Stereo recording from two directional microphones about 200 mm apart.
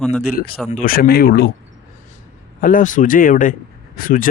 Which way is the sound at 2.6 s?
40° left (ahead or behind).